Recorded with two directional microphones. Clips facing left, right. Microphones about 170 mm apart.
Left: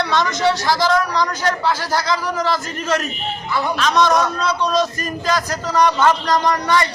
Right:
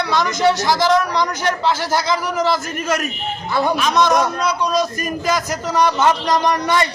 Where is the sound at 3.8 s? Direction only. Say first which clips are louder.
Left 2 dB; 15° right (ahead or behind).